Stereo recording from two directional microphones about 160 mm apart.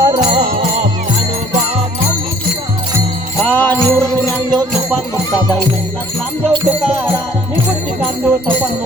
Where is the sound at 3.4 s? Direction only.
10° left (ahead or behind).